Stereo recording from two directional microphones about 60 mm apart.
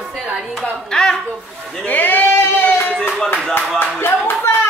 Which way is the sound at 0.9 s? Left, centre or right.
Centre.